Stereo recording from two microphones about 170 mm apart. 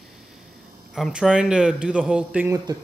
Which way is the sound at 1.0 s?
Centre (ahead or behind).